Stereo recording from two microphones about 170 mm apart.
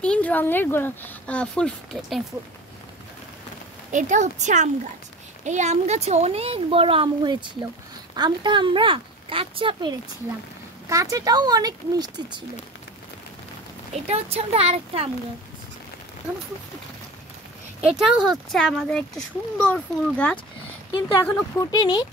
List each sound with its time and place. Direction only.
0.0 s speech: 5° left (ahead or behind)
3.9 s a woman's voice: 45° right (ahead or behind); by 12.4 s 25° right (ahead or behind)
14.0 s speech: 35° right (ahead or behind)
17.8 s a child's voice: 5° right (ahead or behind)
20.9 s speech: 25° left (ahead or behind)